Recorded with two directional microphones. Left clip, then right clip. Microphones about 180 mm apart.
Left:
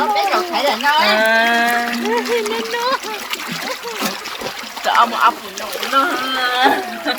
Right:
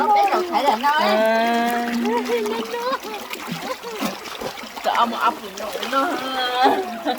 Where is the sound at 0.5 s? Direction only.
10° right (ahead or behind).